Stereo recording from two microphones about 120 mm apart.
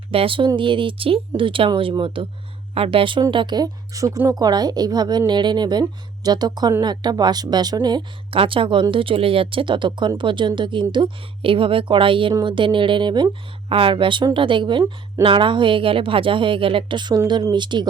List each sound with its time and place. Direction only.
0.1 s a woman's voice: 50° right (ahead or behind)
13.7 s a woman's voice: 50° right (ahead or behind)